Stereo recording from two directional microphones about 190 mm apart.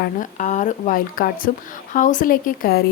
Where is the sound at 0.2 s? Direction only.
40° left (ahead or behind).